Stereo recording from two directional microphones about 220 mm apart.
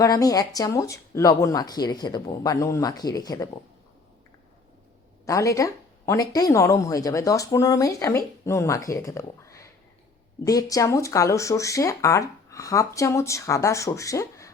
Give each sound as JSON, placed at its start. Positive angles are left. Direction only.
{"t": 0.0, "sound": "speech", "side_deg": 15}
{"t": 5.2, "sound": "speech", "side_deg": 15}